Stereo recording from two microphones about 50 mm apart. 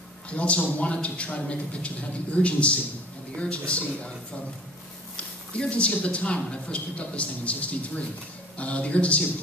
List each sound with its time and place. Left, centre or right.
0.3 s a man's voice: left
5.1 s a man's voice: left